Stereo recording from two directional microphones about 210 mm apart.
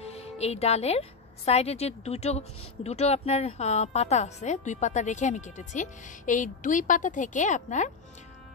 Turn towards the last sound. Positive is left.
turn(degrees=35)  # may be behind; listen again after turning